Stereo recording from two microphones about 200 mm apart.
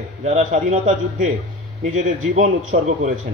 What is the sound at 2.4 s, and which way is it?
Speech, 35° right (ahead or behind).